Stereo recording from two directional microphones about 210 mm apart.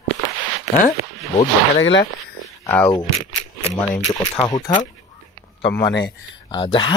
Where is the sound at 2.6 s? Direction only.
15° left (ahead or behind).